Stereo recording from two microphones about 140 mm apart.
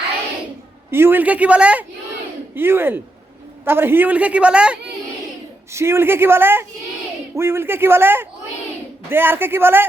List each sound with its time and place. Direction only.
0.9 s a woman's voice: 15° right (ahead or behind)
5.7 s a woman's voice: 20° right (ahead or behind)